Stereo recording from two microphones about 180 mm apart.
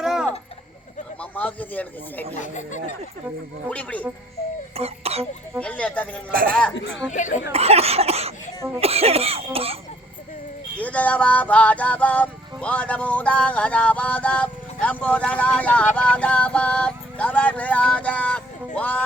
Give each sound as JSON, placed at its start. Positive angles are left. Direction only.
{"t": 0.0, "sound": "clock", "side_deg": 0}
{"t": 1.2, "sound": "speech", "side_deg": 10}
{"t": 2.4, "sound": "speech", "side_deg": 45}
{"t": 3.7, "sound": "music", "side_deg": 5}
{"t": 4.8, "sound": "speech", "side_deg": -35}
{"t": 5.5, "sound": "music", "side_deg": 5}
{"t": 6.3, "sound": "speech", "side_deg": -55}
{"t": 7.1, "sound": "speech", "side_deg": 45}
{"t": 7.5, "sound": "cough", "side_deg": -35}
{"t": 10.8, "sound": "music", "side_deg": 10}